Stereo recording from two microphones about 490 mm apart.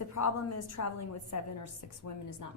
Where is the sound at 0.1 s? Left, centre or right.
Left.